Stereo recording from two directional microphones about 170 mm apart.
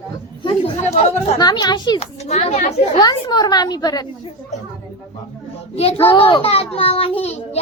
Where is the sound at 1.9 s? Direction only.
40° left (ahead or behind).